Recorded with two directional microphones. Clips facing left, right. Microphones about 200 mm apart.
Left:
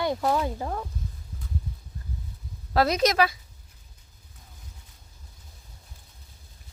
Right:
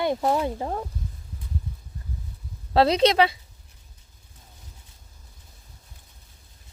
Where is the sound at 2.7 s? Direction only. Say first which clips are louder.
Right 4 dB; 30° right (ahead or behind).